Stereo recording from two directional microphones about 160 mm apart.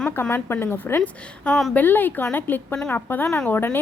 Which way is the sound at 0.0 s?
10° left (ahead or behind).